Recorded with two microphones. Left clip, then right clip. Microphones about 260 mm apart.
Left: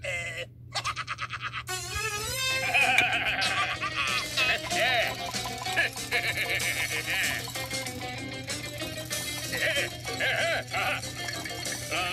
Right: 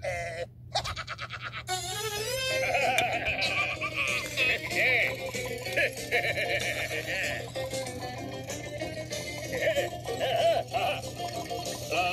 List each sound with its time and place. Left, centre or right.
2.1 s music: left
5.7 s music: centre
9.1 s music: left